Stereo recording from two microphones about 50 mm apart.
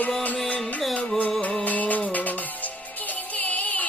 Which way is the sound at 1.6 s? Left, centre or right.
Left.